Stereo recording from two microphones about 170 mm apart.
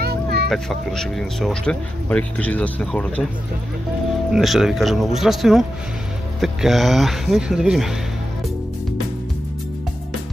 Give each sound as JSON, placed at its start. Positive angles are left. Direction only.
{"t": 0.0, "sound": "vehicle", "side_deg": -65}
{"t": 0.5, "sound": "speech", "side_deg": 0}
{"t": 4.3, "sound": "speech", "side_deg": 0}